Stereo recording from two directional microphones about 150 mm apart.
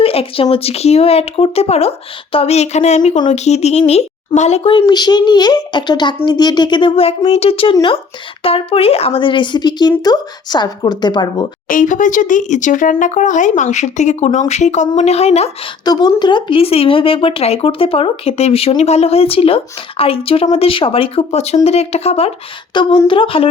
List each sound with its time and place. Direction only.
0.0 s a sound: 40° left (ahead or behind)
0.5 s a woman's voice: 40° left (ahead or behind)
11.7 s speech: 60° left (ahead or behind); by 15.5 s 45° left (ahead or behind)
15.8 s a woman's voice: 25° left (ahead or behind); by 22.3 s 40° left (ahead or behind)
22.7 s a woman's voice: 30° left (ahead or behind)